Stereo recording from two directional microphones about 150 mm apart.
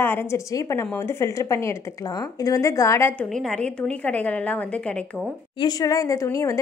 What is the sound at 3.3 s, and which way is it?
A woman's voice, 5° left (ahead or behind).